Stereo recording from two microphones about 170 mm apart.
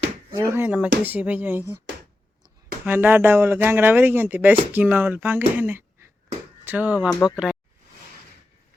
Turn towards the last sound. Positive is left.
turn(degrees=-5)  # may be behind; listen again after turning